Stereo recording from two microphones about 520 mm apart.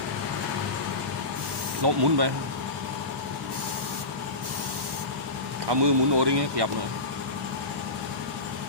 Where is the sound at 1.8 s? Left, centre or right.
Right.